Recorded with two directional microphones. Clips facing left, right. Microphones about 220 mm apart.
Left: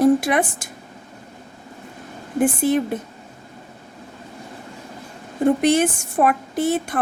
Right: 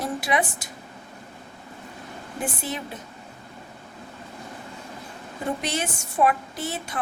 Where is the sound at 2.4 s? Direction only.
50° left (ahead or behind).